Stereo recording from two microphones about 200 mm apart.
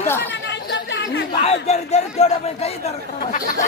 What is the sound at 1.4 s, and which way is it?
Speech, 30° left (ahead or behind).